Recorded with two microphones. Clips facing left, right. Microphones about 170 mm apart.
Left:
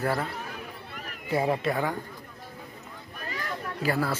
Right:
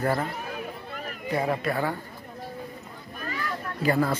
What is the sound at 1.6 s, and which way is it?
Speech, 15° left (ahead or behind).